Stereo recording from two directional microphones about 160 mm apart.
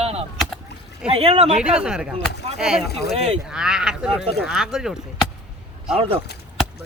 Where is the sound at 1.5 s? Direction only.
5° right (ahead or behind).